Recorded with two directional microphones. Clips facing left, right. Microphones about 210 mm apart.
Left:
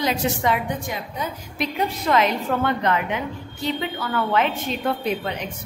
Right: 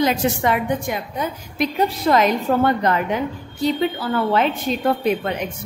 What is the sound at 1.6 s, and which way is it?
A woman's voice, 40° right (ahead or behind).